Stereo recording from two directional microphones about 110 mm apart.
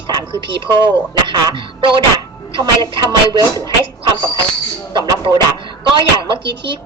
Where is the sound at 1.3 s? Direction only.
45° right (ahead or behind).